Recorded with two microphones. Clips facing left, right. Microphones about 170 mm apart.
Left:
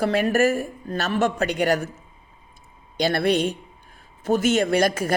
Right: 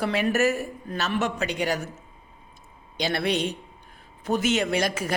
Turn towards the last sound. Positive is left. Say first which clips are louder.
# left 5 dB
turn(degrees=50)  # may be behind; listen again after turning